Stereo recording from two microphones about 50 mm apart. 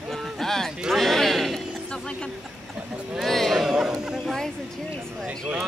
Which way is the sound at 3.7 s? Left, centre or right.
Centre.